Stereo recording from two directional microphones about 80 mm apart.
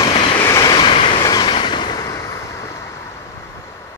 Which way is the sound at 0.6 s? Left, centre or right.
Left.